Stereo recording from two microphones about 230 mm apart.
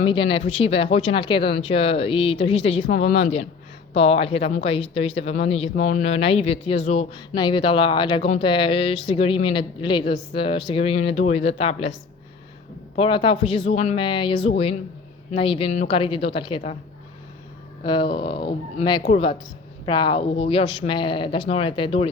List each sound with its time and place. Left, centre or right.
0.0 s a woman's voice: left
3.9 s a woman's voice: left
13.0 s a woman's voice: left
17.8 s a woman's voice: centre